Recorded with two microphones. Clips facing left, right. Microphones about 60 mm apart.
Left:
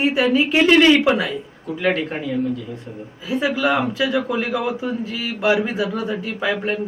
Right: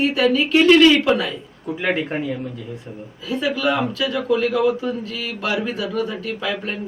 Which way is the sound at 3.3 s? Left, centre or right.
Left.